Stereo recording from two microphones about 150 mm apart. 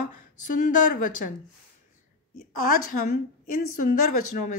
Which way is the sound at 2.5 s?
70° left (ahead or behind).